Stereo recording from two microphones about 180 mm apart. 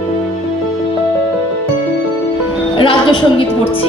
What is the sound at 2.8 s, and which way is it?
Music, 30° left (ahead or behind).